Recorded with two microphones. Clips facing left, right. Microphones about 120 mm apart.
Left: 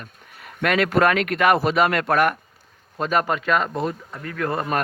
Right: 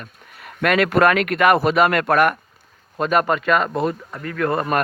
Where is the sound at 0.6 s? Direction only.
60° right (ahead or behind).